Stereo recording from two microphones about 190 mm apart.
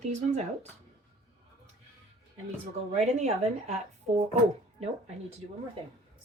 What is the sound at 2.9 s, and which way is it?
A woman's voice, 35° right (ahead or behind).